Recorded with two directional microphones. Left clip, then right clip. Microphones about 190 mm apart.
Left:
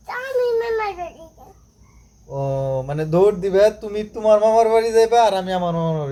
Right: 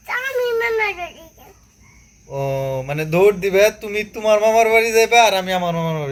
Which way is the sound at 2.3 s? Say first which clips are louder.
Right 1 dB; 20° left (ahead or behind).